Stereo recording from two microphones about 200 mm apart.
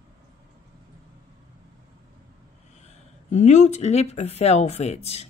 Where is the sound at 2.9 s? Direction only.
35° left (ahead or behind).